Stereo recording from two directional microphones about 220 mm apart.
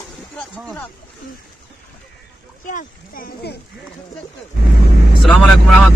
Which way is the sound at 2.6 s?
40° left (ahead or behind).